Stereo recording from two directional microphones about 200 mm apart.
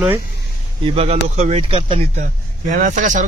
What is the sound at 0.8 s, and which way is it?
Speech, 30° right (ahead or behind).